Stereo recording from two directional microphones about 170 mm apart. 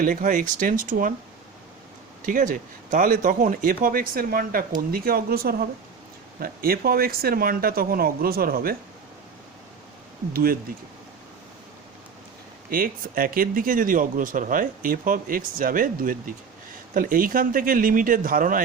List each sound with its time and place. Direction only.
0.0 s speech: 50° right (ahead or behind)
2.2 s speech: 50° right (ahead or behind)
10.3 s speech: 60° right (ahead or behind)
12.7 s speech: 55° right (ahead or behind)